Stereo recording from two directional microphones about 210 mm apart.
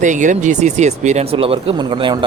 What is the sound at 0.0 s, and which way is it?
Speech, 35° right (ahead or behind).